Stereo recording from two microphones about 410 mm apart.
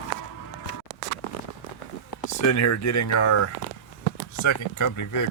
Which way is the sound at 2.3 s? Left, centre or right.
Left.